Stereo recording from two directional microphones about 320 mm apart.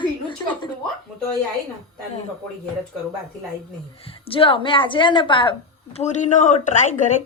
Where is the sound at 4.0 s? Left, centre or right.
Centre.